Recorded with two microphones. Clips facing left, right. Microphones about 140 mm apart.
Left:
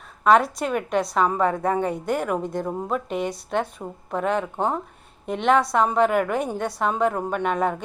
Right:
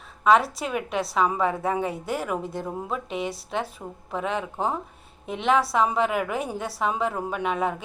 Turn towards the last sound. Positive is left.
turn(degrees=-5)  # may be behind; listen again after turning